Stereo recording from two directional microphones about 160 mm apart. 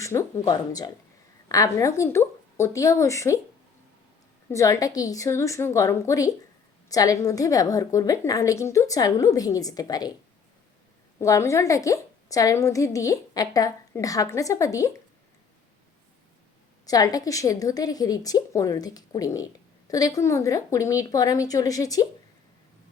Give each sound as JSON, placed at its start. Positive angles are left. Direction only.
{"t": 0.0, "sound": "a woman's voice", "side_deg": 20}
{"t": 4.4, "sound": "a woman's voice", "side_deg": 20}
{"t": 11.2, "sound": "a woman's voice", "side_deg": 20}
{"t": 16.8, "sound": "a woman's voice", "side_deg": 25}